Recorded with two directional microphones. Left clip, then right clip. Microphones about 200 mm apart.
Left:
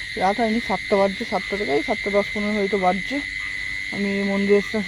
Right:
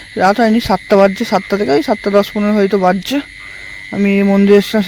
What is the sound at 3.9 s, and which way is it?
Speech, 55° right (ahead or behind).